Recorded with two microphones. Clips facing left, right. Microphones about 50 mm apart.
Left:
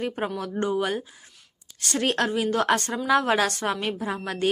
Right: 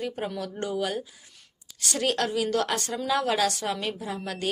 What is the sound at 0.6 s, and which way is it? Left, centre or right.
A woman's voice, left.